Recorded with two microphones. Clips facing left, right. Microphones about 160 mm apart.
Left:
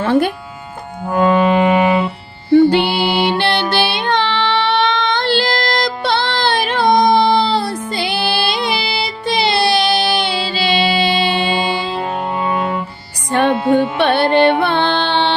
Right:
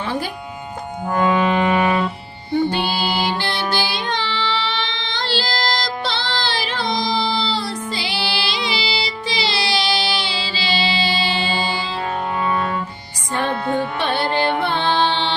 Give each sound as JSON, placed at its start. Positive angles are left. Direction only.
{"t": 0.0, "sound": "music", "side_deg": 65}
{"t": 1.0, "sound": "music", "side_deg": 0}
{"t": 1.5, "sound": "music", "side_deg": 15}
{"t": 2.5, "sound": "music", "side_deg": 70}
{"t": 12.5, "sound": "music", "side_deg": 20}
{"t": 14.0, "sound": "music", "side_deg": 65}